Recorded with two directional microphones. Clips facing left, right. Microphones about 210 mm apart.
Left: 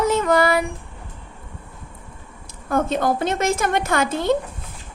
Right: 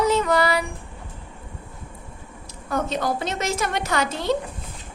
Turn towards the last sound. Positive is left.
turn(degrees=50)  # may be behind; listen again after turning